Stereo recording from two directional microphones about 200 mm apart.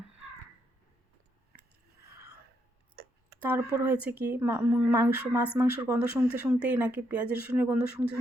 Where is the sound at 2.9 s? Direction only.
50° right (ahead or behind).